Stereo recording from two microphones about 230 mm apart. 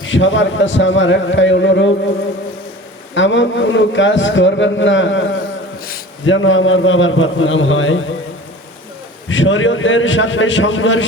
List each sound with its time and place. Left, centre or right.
0.0 s a man's voice: left
3.2 s a man's voice: left
9.3 s a man's voice: left